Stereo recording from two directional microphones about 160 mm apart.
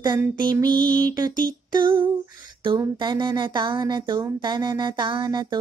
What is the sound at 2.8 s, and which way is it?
A woman's voice, 30° right (ahead or behind).